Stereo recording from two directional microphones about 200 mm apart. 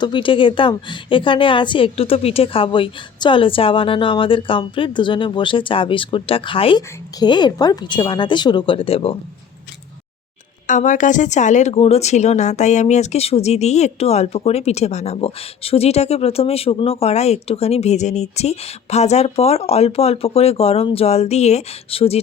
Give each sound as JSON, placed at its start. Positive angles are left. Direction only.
{"t": 0.0, "sound": "a woman's voice", "side_deg": 25}
{"t": 10.7, "sound": "speech", "side_deg": 40}